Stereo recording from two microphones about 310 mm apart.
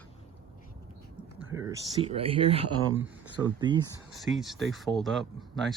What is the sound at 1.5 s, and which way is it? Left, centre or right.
Speech, centre.